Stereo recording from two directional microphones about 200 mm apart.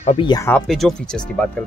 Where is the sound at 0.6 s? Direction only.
Centre (ahead or behind).